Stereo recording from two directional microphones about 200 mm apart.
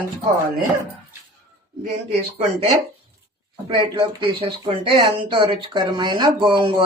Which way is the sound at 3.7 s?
25° right (ahead or behind).